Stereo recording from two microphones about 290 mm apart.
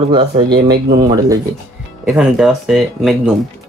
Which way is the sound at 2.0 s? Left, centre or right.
Centre.